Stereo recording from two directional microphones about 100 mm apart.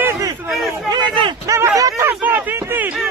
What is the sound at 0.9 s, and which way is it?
Speech, 50° right (ahead or behind).